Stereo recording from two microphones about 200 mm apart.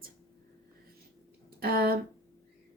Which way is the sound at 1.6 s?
50° right (ahead or behind).